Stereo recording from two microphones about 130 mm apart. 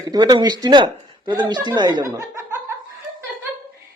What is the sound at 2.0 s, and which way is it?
Chuckle, 20° right (ahead or behind).